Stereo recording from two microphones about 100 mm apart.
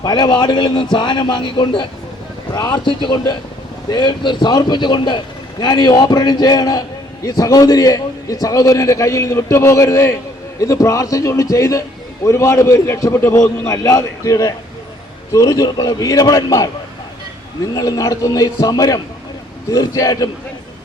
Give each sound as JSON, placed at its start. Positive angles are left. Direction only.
{"t": 0.0, "sound": "a man's voice", "side_deg": 45}
{"t": 2.5, "sound": "a man's voice", "side_deg": 45}
{"t": 17.7, "sound": "a man's voice", "side_deg": 35}